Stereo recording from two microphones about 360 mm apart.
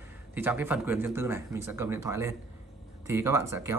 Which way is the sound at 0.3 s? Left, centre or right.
Centre.